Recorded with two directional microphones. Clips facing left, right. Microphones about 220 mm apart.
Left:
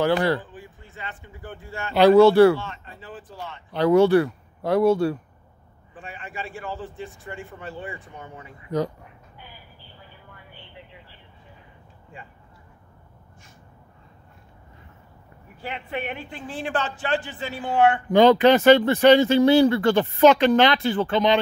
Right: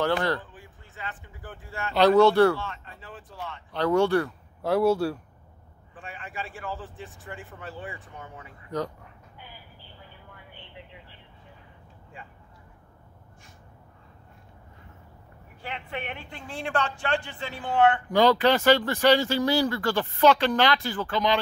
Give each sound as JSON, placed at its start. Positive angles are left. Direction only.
{"t": 0.0, "sound": "speech", "side_deg": 10}
{"t": 3.7, "sound": "speech", "side_deg": 10}
{"t": 4.6, "sound": "speech", "side_deg": -5}
{"t": 8.5, "sound": "speech", "side_deg": 10}
{"t": 10.5, "sound": "vehicle", "side_deg": -20}
{"t": 15.6, "sound": "speech", "side_deg": 5}
{"t": 18.1, "sound": "speech", "side_deg": 20}